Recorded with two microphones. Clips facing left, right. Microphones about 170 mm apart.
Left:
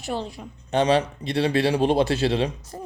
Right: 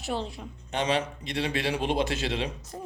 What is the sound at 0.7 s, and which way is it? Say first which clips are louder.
A man's voice: left 7 dB; 35° left (ahead or behind).